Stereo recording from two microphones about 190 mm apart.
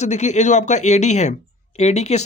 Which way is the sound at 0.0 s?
35° left (ahead or behind).